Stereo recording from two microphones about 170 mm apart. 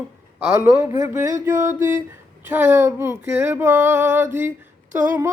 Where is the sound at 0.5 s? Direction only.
15° right (ahead or behind).